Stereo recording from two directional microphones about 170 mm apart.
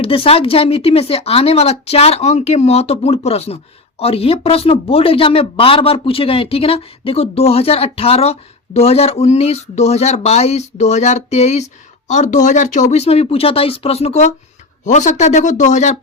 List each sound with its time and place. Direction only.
0.0 s speech: 30° left (ahead or behind)